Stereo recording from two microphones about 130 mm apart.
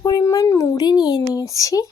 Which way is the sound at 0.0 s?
25° left (ahead or behind).